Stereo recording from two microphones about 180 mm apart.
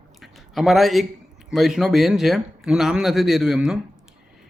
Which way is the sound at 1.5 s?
Centre (ahead or behind).